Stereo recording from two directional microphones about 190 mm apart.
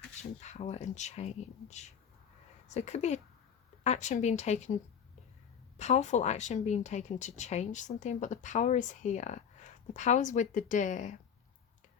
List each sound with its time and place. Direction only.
0.2 s speech: 35° left (ahead or behind)